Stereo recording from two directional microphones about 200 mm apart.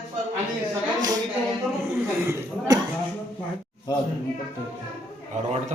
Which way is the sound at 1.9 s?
10° right (ahead or behind).